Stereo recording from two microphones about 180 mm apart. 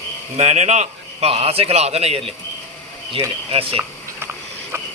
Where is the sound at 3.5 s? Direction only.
30° right (ahead or behind).